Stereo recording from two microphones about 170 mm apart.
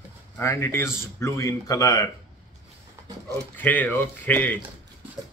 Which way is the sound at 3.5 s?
10° left (ahead or behind).